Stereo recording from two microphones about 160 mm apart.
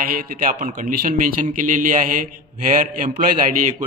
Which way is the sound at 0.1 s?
55° right (ahead or behind).